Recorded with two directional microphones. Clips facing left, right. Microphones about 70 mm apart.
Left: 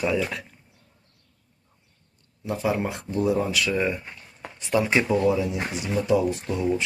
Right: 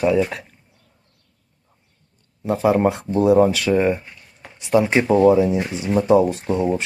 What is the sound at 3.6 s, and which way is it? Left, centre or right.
Speech, right.